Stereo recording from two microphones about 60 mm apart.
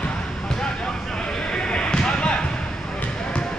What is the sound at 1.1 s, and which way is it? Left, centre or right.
Basketball bounce, centre.